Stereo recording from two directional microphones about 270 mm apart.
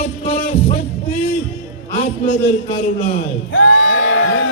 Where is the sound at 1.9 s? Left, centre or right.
Left.